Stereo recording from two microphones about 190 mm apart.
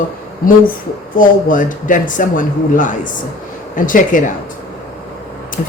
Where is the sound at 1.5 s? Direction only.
45° left (ahead or behind).